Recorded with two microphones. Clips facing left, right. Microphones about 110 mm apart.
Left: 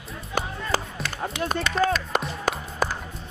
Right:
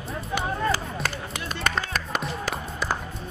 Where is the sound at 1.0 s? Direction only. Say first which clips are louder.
Right 3 dB; centre (ahead or behind).